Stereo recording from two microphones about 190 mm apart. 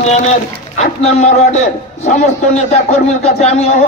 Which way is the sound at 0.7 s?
35° left (ahead or behind).